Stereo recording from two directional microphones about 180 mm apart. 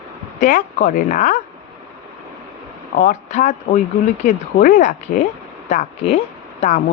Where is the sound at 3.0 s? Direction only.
45° left (ahead or behind).